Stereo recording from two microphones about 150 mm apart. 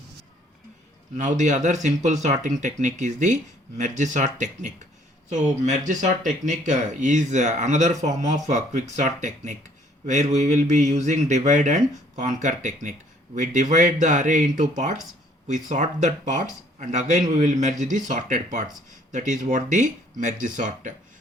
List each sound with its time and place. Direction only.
1.1 s speech: 55° right (ahead or behind)